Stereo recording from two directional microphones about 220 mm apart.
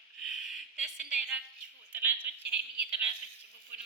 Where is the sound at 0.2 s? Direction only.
Centre (ahead or behind).